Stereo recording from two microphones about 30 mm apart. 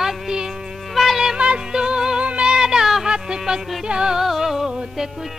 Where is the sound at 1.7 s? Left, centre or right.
Right.